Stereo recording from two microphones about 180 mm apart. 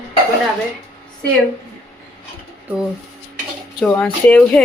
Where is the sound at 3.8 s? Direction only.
5° left (ahead or behind).